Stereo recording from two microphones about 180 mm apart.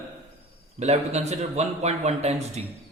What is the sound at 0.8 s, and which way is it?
A man's voice, 40° right (ahead or behind).